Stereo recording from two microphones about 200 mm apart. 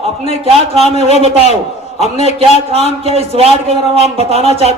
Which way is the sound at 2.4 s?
30° right (ahead or behind).